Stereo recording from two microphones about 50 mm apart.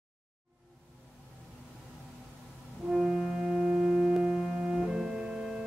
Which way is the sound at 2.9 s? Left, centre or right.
Centre.